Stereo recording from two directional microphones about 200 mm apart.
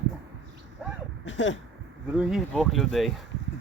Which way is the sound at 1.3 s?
65° left (ahead or behind).